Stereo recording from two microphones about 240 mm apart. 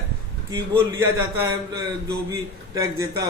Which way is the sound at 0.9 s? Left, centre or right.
Centre.